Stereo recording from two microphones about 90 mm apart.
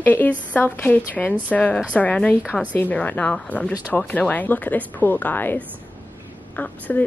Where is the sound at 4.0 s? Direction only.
15° left (ahead or behind).